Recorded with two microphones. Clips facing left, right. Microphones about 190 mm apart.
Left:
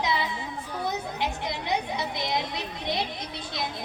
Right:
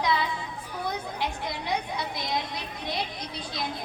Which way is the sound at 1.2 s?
25° left (ahead or behind).